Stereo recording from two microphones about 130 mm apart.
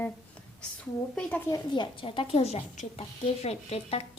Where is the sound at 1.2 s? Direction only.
10° left (ahead or behind).